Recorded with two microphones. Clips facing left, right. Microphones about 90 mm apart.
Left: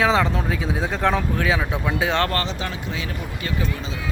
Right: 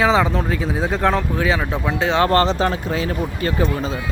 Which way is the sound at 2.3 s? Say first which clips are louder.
Right 9 dB; 40° right (ahead or behind).